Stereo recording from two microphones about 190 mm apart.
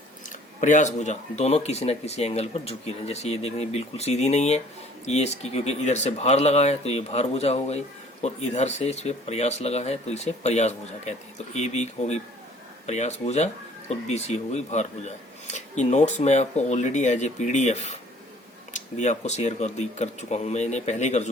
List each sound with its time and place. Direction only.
0.6 s speech: 40° left (ahead or behind)